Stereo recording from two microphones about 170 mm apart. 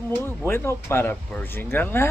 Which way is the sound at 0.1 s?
15° left (ahead or behind).